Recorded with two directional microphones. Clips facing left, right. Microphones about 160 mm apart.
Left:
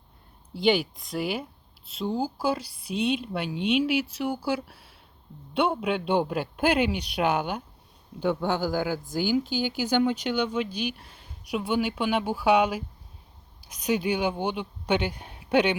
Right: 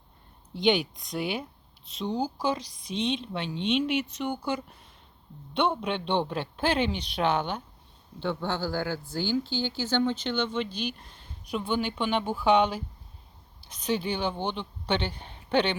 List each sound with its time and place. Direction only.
0.5 s speech: 5° left (ahead or behind)